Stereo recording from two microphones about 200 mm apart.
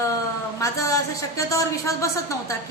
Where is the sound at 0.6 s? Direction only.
15° left (ahead or behind).